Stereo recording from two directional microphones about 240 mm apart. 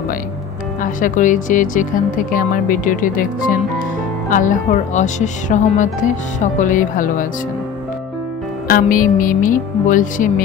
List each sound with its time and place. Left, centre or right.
1.0 s speech: left
8.6 s speech: left